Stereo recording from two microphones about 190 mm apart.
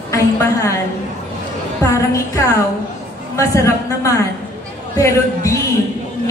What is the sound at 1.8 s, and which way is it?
A man's voice, 15° left (ahead or behind).